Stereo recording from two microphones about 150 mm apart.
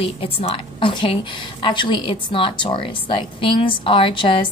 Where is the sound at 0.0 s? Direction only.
40° left (ahead or behind).